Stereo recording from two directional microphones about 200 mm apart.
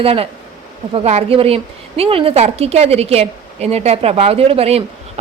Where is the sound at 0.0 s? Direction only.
30° right (ahead or behind).